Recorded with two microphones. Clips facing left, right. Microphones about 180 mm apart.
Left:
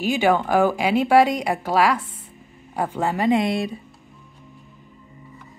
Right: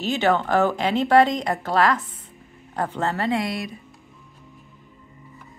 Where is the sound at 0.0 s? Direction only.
10° left (ahead or behind); by 3.7 s 25° left (ahead or behind).